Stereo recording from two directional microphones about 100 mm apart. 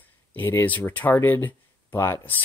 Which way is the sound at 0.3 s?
20° left (ahead or behind).